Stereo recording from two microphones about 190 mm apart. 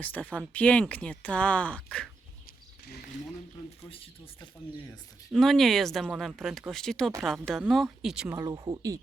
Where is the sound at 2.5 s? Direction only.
55° left (ahead or behind).